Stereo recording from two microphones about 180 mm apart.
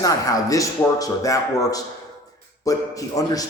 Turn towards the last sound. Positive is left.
turn(degrees=20)  # may be behind; listen again after turning